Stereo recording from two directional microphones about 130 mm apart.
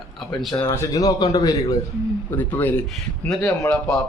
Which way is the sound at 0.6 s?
20° left (ahead or behind).